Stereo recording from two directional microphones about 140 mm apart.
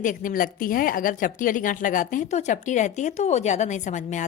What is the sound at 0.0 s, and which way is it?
A woman's voice, 70° left (ahead or behind).